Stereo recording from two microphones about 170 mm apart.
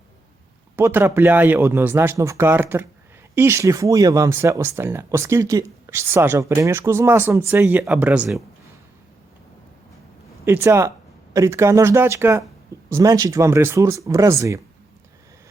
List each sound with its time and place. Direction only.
0.8 s speech: 15° right (ahead or behind)
10.4 s speech: 15° right (ahead or behind)